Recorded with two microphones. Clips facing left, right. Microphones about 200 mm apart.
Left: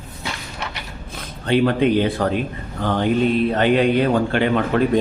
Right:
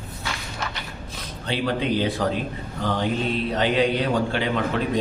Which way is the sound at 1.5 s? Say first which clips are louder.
Left 8 dB; 55° left (ahead or behind).